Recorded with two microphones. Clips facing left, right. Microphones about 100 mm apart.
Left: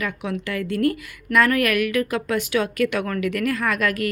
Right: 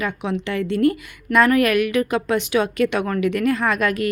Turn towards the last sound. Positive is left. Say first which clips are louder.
# right 2 dB
turn(degrees=-25)  # may be behind; listen again after turning